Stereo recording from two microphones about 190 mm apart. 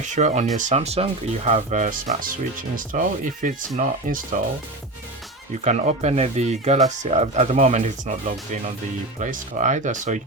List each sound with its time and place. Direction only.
0.0 s speech: 40° right (ahead or behind)
5.6 s speech: 35° right (ahead or behind)
9.2 s speech: 40° right (ahead or behind)